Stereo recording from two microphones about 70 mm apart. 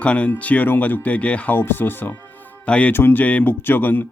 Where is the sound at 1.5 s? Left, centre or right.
Left.